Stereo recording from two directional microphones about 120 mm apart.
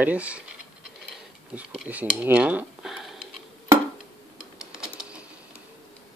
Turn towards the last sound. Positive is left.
turn(degrees=-5)  # may be behind; listen again after turning